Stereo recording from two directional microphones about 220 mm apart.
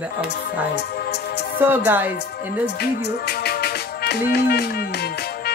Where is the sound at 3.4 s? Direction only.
45° left (ahead or behind).